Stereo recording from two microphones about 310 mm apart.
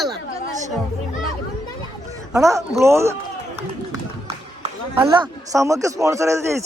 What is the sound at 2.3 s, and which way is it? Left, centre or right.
Speech, centre.